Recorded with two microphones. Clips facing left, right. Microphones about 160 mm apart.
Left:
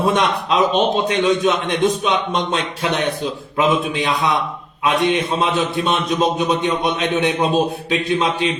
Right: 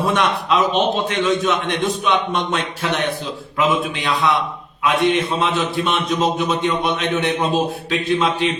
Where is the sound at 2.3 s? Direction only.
20° left (ahead or behind).